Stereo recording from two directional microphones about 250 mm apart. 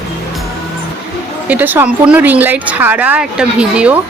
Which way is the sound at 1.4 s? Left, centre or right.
Centre.